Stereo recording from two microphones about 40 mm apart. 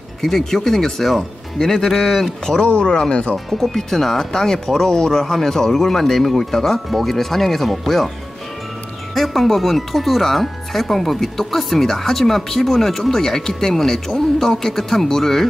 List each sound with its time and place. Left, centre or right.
0.2 s speech: centre
2.6 s speech: left
3.4 s speech: centre
9.1 s speech: centre